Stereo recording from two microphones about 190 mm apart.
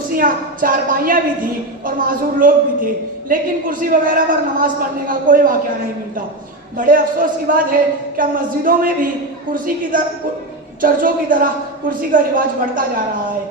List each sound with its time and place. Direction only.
0.2 s a woman's voice: 45° right (ahead or behind)
6.7 s a woman's voice: 45° right (ahead or behind)